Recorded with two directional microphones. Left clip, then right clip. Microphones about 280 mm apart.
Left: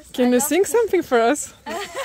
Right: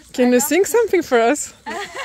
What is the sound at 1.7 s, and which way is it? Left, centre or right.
Speech, centre.